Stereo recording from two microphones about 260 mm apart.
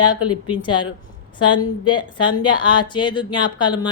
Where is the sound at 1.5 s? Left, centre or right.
Centre.